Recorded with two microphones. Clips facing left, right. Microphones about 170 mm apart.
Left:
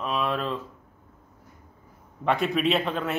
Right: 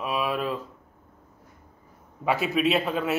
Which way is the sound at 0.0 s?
10° right (ahead or behind).